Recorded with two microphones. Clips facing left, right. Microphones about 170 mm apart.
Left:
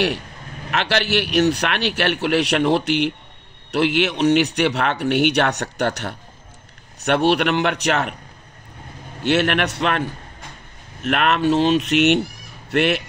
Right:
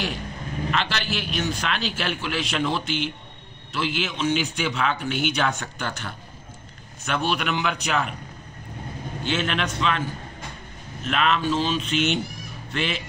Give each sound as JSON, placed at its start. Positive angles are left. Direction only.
{"t": 0.7, "sound": "a man's voice", "side_deg": 75}
{"t": 9.2, "sound": "a man's voice", "side_deg": 70}
{"t": 11.1, "sound": "a man's voice", "side_deg": 65}